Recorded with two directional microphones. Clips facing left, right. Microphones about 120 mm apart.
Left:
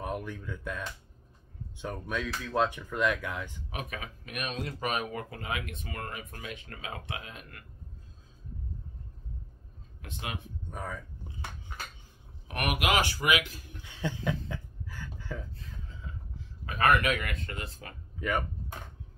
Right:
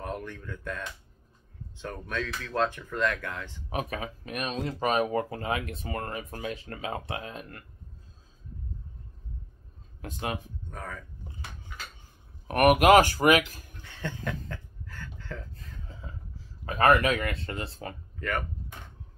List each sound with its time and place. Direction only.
0.0 s speech: 10° left (ahead or behind)
3.7 s speech: 35° right (ahead or behind)
10.0 s speech: 40° right (ahead or behind)
10.7 s speech: 10° left (ahead or behind)
12.4 s speech: 45° right (ahead or behind)
13.8 s chuckle: 10° left (ahead or behind)
16.3 s speech: 35° right (ahead or behind)
18.2 s speech: 10° left (ahead or behind)